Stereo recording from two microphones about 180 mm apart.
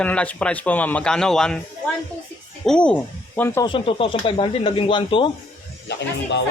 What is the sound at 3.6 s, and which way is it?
Speech, 30° left (ahead or behind).